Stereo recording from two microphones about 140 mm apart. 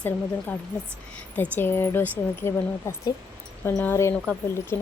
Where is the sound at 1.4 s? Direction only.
15° left (ahead or behind).